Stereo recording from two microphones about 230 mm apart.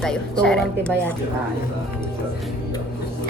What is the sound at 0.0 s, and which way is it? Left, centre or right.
Speech, centre.